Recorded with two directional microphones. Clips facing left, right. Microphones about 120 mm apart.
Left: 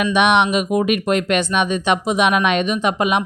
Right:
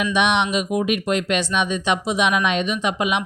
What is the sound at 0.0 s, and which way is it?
Speech, 55° left (ahead or behind).